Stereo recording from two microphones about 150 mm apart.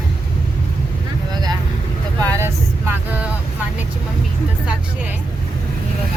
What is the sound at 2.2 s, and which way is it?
Speech, 20° right (ahead or behind).